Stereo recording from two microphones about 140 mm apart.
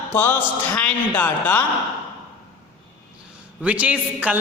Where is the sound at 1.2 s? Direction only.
15° left (ahead or behind).